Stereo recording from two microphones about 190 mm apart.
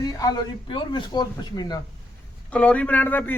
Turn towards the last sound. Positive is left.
turn(degrees=10)  # may be behind; listen again after turning